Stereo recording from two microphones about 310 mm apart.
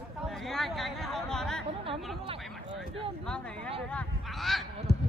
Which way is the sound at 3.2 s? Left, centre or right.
Centre.